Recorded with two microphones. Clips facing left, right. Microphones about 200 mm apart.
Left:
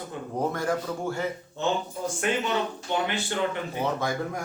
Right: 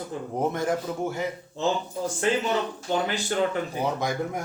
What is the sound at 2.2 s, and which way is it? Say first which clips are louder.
Speech: right 2 dB; 30° right (ahead or behind).